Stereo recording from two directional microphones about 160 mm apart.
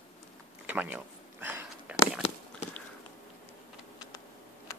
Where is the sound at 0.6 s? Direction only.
10° right (ahead or behind).